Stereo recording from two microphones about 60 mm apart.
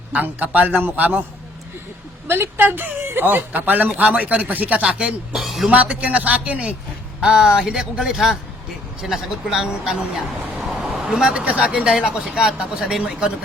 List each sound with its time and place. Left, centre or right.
0.1 s speech: right
2.2 s speech: right; by 5.1 s centre
5.3 s a woman's voice: centre
5.7 s speech: right; by 9.6 s centre
10.6 s vehicle: centre
11.9 s speech: centre